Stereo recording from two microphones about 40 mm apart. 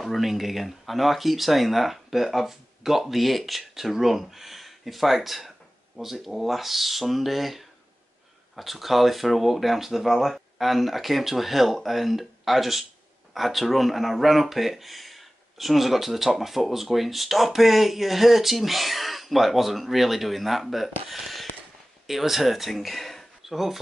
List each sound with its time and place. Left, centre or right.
0.0 s speech: centre
21.1 s a sound: centre
22.0 s speech: centre